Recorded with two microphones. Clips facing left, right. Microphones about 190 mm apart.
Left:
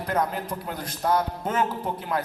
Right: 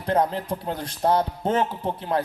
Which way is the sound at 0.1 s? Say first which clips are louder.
Right 5 dB; 30° right (ahead or behind).